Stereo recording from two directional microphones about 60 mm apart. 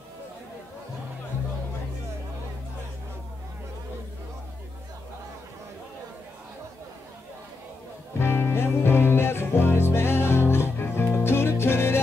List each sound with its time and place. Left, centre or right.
8.2 s music: left